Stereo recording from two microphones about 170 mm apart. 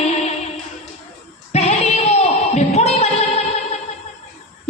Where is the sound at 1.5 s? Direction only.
40° left (ahead or behind).